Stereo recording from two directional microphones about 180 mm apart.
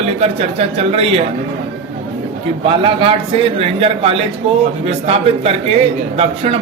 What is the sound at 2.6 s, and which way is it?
A man's voice, 30° right (ahead or behind).